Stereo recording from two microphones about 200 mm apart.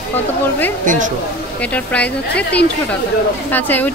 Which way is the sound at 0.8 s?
40° right (ahead or behind).